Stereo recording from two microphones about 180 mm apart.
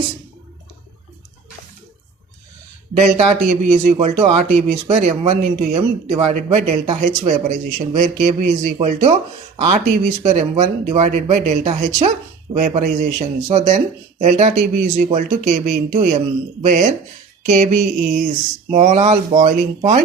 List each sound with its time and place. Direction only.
3.2 s speech: 35° right (ahead or behind)
17.5 s a sound: 40° right (ahead or behind)
18.7 s speech: 40° right (ahead or behind)